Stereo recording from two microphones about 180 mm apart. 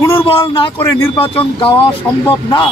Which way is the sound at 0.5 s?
30° left (ahead or behind).